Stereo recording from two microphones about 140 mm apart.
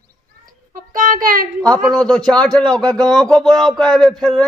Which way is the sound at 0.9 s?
75° right (ahead or behind).